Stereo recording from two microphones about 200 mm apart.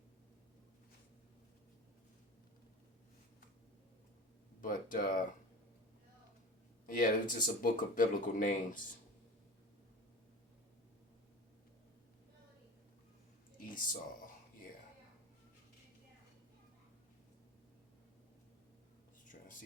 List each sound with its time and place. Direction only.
4.6 s speech: 45° left (ahead or behind)
6.8 s speech: 45° left (ahead or behind)
13.6 s a sound: 45° left (ahead or behind)